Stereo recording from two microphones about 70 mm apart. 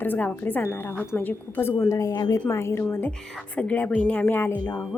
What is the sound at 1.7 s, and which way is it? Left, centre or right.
A woman's voice, left.